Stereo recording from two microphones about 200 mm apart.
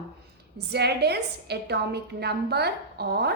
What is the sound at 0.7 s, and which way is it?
A woman's voice, 55° right (ahead or behind).